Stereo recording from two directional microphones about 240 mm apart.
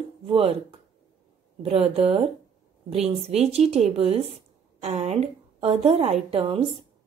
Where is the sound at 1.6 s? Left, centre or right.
Right.